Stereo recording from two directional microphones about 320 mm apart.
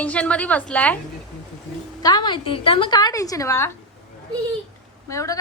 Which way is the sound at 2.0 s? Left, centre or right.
Centre.